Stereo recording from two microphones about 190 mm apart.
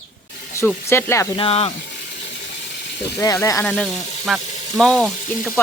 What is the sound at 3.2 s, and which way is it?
Speech, 15° left (ahead or behind).